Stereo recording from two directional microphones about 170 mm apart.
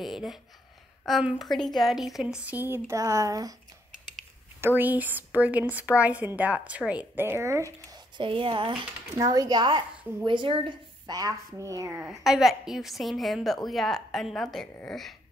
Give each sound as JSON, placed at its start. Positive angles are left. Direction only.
{"t": 0.0, "sound": "a woman's voice", "side_deg": 0}
{"t": 4.6, "sound": "a woman's voice", "side_deg": -10}
{"t": 7.9, "sound": "speech", "side_deg": -30}
{"t": 12.1, "sound": "a woman's voice", "side_deg": 0}